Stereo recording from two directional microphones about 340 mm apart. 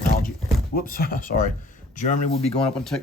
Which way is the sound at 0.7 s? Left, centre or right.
Left.